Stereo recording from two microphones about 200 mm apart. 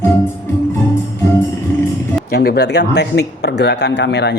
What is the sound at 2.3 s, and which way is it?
A man's voice, 50° left (ahead or behind).